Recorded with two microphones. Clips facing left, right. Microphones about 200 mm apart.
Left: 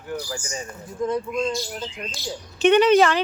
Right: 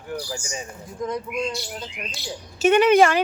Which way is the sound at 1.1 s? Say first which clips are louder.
Left 3 dB; 15° right (ahead or behind).